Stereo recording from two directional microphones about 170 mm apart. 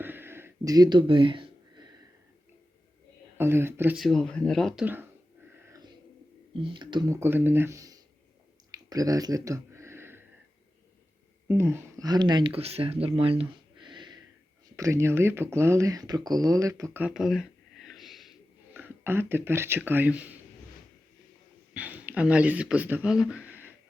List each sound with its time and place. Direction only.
0.0 s a sound: 10° right (ahead or behind)
3.3 s speech: 15° right (ahead or behind)
3.9 s speech: centre (ahead or behind)
5.6 s a sound: 20° right (ahead or behind)
6.5 s speech: 30° right (ahead or behind)
8.7 s a sound: 20° right (ahead or behind)
11.4 s speech: 15° right (ahead or behind)
18.7 s speech: 15° right (ahead or behind)
21.7 s speech: 10° right (ahead or behind)